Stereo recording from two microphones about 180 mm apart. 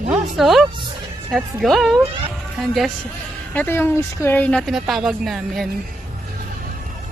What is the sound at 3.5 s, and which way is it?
Speech, 10° left (ahead or behind).